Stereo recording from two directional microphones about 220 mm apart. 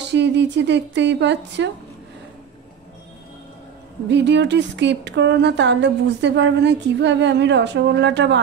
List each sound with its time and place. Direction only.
0.0 s speech: 50° right (ahead or behind)
4.1 s speech: 55° right (ahead or behind)